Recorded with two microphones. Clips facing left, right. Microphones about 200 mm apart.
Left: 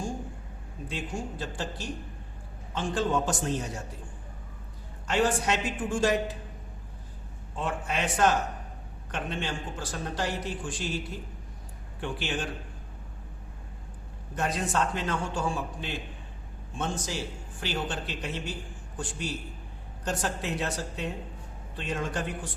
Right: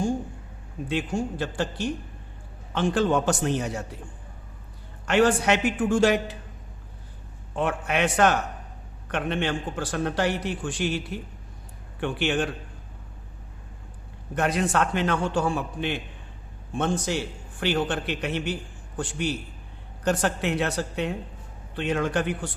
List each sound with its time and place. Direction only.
0.9 s a man's voice: 70° right (ahead or behind)
5.0 s a man's voice: 70° right (ahead or behind)
7.5 s a man's voice: 65° right (ahead or behind)
14.3 s a man's voice: 70° right (ahead or behind)
20.1 s a man's voice: 70° right (ahead or behind)